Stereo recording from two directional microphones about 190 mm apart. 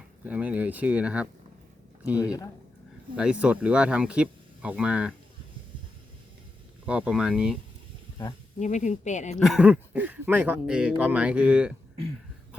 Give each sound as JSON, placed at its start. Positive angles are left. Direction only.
{"t": 0.3, "sound": "speech", "side_deg": -5}
{"t": 6.8, "sound": "speech", "side_deg": -5}
{"t": 8.5, "sound": "speech", "side_deg": 40}
{"t": 9.4, "sound": "speech", "side_deg": -5}